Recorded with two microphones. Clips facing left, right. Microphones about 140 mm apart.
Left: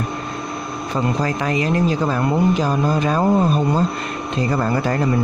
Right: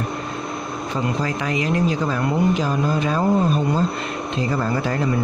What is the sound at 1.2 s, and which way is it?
Speech, 40° left (ahead or behind).